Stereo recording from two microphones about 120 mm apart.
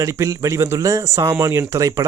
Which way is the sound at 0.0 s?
25° right (ahead or behind).